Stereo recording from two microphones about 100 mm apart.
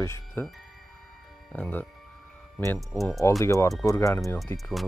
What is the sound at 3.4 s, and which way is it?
Speech, 30° left (ahead or behind).